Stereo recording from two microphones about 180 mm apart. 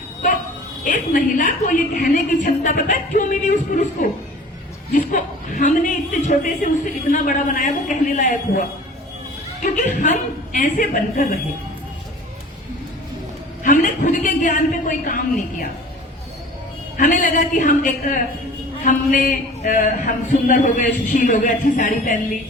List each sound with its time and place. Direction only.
0.9 s a man's voice: 45° left (ahead or behind)
9.7 s a man's voice: 45° left (ahead or behind)
13.7 s a man's voice: 45° left (ahead or behind)
17.0 s a man's voice: 45° left (ahead or behind)